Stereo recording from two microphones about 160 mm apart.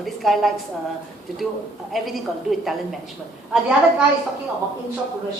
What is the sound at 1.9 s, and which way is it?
A woman's voice, centre (ahead or behind).